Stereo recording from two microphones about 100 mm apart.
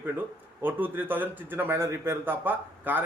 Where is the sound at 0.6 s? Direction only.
20° right (ahead or behind).